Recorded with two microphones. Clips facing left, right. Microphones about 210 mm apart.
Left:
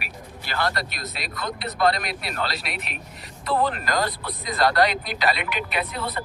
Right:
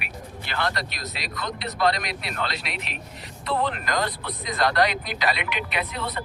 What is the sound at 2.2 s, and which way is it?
A man's voice, 40° left (ahead or behind).